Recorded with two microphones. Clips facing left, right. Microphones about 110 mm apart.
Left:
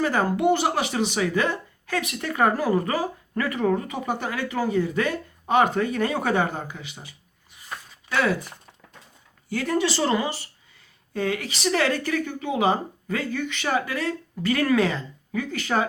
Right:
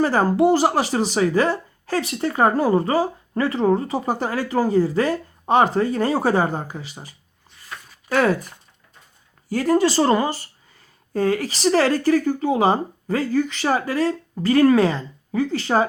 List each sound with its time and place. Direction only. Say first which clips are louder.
0.0 s speech: right 5 dB; 35° right (ahead or behind)
9.5 s speech: right 6 dB; 35° right (ahead or behind)